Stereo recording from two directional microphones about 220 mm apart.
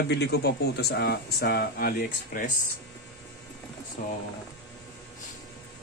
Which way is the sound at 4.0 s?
35° left (ahead or behind).